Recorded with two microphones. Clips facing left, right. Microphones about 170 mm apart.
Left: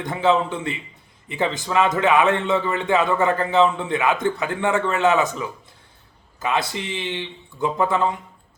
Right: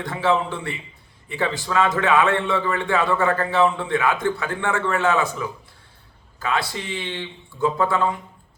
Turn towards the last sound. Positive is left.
turn(degrees=15)  # may be behind; listen again after turning